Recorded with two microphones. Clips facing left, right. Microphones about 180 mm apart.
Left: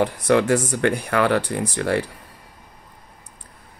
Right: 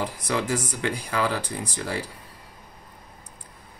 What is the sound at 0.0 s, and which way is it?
Speech, 65° left (ahead or behind).